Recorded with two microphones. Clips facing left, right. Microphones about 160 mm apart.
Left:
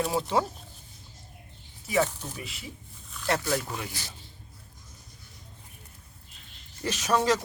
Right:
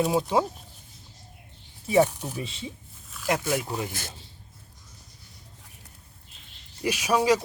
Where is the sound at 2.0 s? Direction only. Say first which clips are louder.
Right 5 dB; 10° right (ahead or behind).